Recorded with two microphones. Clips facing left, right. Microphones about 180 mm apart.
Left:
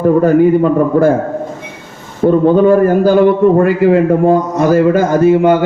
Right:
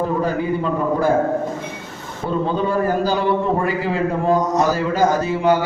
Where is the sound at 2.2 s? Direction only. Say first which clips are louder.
Left 12 dB; 55° left (ahead or behind).